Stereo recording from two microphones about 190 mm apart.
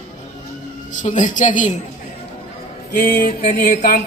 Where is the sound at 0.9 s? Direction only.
40° left (ahead or behind).